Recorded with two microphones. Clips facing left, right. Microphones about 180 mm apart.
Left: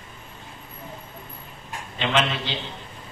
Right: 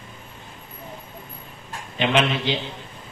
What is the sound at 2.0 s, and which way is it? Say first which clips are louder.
Speech: right 3 dB; 15° right (ahead or behind).